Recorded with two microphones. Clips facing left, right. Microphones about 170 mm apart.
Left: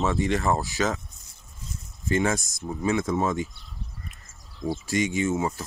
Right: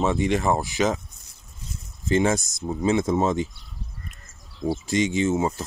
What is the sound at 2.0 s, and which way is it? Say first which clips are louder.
A man's voice: right 3 dB; 20° right (ahead or behind).